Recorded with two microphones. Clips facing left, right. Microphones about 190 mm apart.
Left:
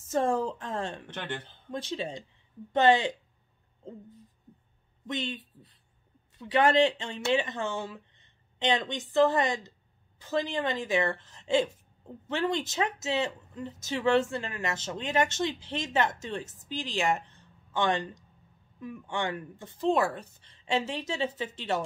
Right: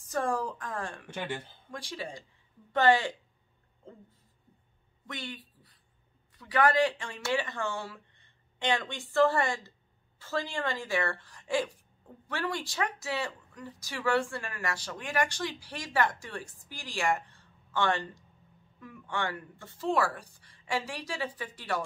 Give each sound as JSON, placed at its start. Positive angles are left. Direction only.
{"t": 0.0, "sound": "a woman's voice", "side_deg": 25}
{"t": 1.0, "sound": "speech", "side_deg": -10}
{"t": 1.7, "sound": "a woman's voice", "side_deg": 20}
{"t": 5.0, "sound": "a woman's voice", "side_deg": 20}